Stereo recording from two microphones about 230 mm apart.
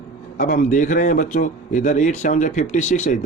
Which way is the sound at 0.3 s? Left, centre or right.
Left.